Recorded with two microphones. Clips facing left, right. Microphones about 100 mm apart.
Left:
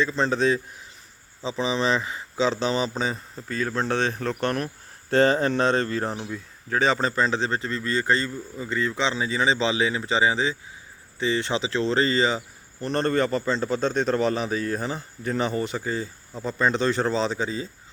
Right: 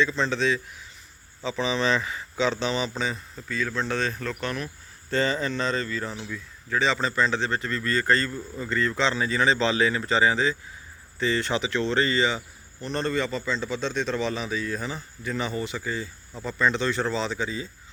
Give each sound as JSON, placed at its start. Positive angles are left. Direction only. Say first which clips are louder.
{"t": 0.0, "sound": "speech", "louder": "left 2 dB", "side_deg": 40}
{"t": 1.4, "sound": "a man's voice", "louder": "left 1 dB", "side_deg": 25}
{"t": 6.2, "sound": "speech", "louder": "left 2 dB", "side_deg": 45}
{"t": 12.8, "sound": "a man's voice", "louder": "left 4 dB", "side_deg": 50}